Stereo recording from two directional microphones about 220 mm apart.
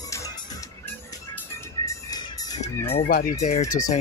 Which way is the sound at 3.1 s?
40° left (ahead or behind).